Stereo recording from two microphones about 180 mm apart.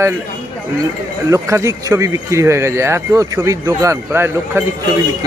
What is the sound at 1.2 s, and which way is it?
Speech, 15° right (ahead or behind).